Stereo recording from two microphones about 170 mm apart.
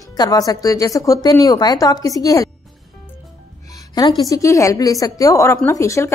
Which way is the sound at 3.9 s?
25° left (ahead or behind).